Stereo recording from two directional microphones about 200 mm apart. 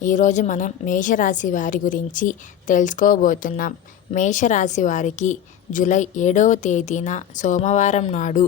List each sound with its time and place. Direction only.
0.0 s a woman's voice: 40° left (ahead or behind)